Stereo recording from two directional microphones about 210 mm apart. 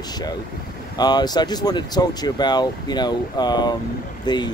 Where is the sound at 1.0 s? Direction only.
20° left (ahead or behind).